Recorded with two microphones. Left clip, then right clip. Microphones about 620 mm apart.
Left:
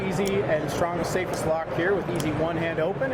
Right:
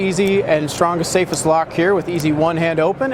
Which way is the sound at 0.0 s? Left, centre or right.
Right.